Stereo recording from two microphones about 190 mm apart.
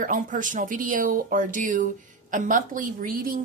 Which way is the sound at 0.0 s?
45° right (ahead or behind).